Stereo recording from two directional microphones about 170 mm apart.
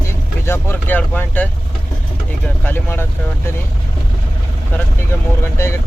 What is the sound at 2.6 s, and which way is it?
Speech, 10° left (ahead or behind).